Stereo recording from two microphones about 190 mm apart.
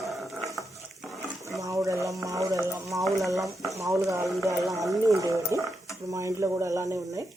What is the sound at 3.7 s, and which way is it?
Speech, 15° right (ahead or behind).